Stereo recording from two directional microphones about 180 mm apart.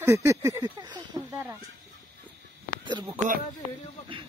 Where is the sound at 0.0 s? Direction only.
15° right (ahead or behind).